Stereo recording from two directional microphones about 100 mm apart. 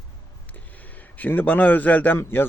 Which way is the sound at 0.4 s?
15° left (ahead or behind).